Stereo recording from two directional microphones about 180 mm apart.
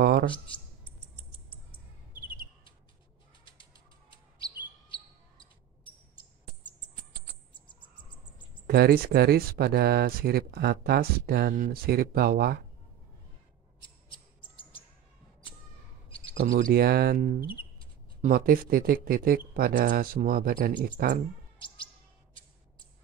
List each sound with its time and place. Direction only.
8.6 s speech: 60° right (ahead or behind)
13.8 s mouse: 25° left (ahead or behind)
16.3 s speech: 50° right (ahead or behind)
21.5 s chirp: 30° left (ahead or behind)